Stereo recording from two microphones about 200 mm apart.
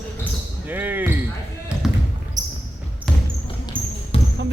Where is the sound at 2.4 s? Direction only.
40° right (ahead or behind).